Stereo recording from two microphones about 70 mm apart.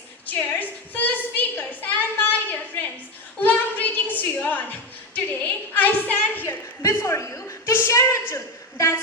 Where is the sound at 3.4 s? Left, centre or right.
Left.